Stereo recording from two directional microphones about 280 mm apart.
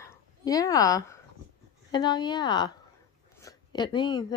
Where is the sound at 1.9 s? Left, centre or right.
Centre.